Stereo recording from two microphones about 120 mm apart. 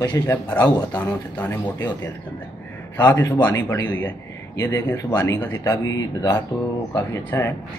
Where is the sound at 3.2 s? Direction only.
30° left (ahead or behind).